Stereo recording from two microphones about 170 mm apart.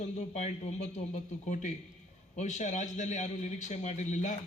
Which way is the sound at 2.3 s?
45° left (ahead or behind).